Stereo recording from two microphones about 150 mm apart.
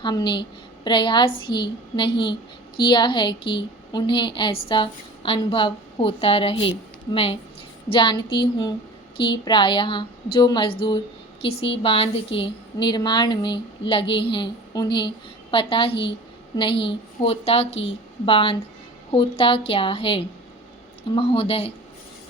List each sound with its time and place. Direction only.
0.0 s a woman's voice: 30° left (ahead or behind)